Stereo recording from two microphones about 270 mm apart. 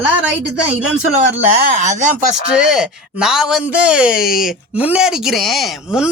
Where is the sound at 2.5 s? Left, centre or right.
Centre.